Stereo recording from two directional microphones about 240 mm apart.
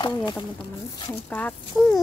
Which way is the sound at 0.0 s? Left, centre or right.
Centre.